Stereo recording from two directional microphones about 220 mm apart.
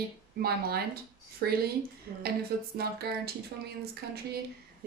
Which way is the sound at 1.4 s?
45° right (ahead or behind).